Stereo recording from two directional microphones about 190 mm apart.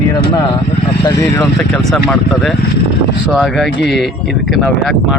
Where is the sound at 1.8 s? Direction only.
Centre (ahead or behind).